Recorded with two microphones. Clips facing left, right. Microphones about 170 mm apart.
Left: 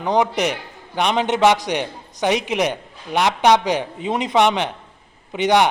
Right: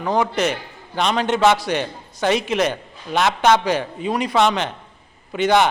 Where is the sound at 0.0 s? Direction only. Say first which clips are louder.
Left 1 dB; 20° left (ahead or behind).